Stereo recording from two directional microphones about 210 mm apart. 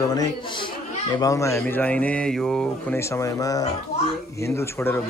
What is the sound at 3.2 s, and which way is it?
Speech, 15° left (ahead or behind).